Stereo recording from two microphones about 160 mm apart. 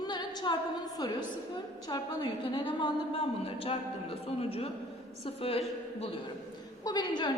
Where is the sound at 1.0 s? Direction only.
25° left (ahead or behind).